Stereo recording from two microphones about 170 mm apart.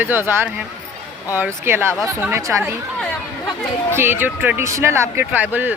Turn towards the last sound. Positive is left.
turn(degrees=-10)  # may be behind; listen again after turning